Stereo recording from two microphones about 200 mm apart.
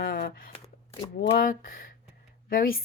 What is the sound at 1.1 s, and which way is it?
Speech, 45° left (ahead or behind).